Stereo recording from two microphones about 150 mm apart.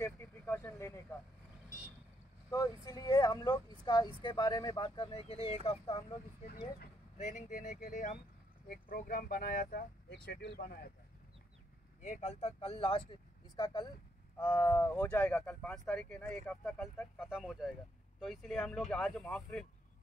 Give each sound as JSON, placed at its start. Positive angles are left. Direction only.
{"t": 0.0, "sound": "a sound", "side_deg": 15}
{"t": 2.5, "sound": "speech", "side_deg": 25}
{"t": 7.2, "sound": "speech", "side_deg": 55}
{"t": 8.6, "sound": "speech", "side_deg": 70}
{"t": 12.0, "sound": "speech", "side_deg": 50}
{"t": 14.4, "sound": "speech", "side_deg": 15}
{"t": 17.2, "sound": "speech", "side_deg": -5}